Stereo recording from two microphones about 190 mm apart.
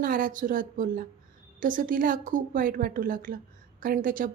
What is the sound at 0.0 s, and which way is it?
A woman's voice, 45° right (ahead or behind).